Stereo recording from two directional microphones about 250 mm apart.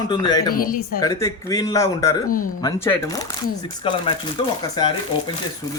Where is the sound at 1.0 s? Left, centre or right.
Centre.